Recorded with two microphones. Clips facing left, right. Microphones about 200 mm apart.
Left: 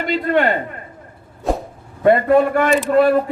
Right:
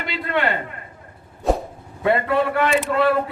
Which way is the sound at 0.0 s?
45° left (ahead or behind).